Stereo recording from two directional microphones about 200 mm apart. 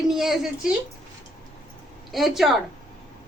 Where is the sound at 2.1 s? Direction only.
Centre (ahead or behind).